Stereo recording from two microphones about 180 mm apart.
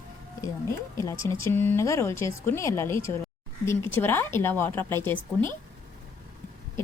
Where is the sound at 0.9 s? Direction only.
15° left (ahead or behind).